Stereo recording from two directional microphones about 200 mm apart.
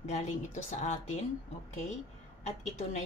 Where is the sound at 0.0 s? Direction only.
35° left (ahead or behind).